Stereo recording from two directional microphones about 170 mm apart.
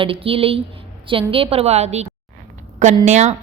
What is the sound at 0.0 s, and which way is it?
Speech, 35° right (ahead or behind).